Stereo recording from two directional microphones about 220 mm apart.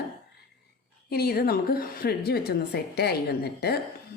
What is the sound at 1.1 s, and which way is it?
A woman's voice, 45° left (ahead or behind).